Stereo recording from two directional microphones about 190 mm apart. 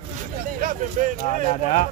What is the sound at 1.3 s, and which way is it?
Speech, 40° left (ahead or behind).